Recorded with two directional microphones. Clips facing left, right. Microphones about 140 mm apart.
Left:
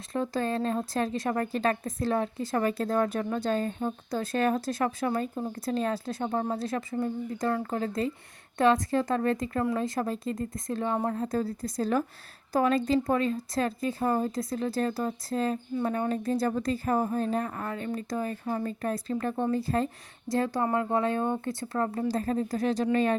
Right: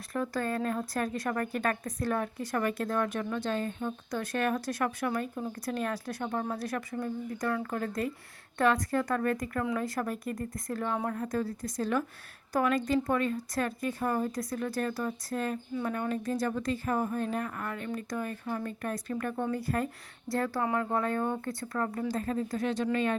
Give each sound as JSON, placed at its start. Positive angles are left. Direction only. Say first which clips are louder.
{"t": 0.1, "sound": "speech", "louder": "left 3 dB", "side_deg": 25}